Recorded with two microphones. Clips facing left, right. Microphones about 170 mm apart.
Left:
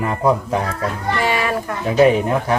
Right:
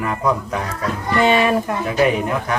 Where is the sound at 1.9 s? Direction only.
30° left (ahead or behind).